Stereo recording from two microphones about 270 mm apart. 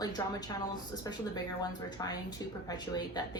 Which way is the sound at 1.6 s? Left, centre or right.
Centre.